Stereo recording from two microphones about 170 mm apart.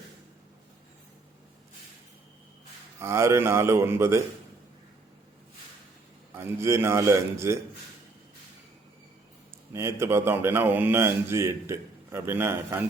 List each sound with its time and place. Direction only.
3.0 s speech: 15° right (ahead or behind)
6.3 s speech: 15° right (ahead or behind)
9.7 s speech: 15° right (ahead or behind)